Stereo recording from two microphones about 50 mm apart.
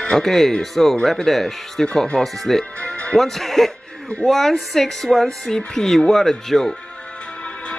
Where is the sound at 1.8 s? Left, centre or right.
Centre.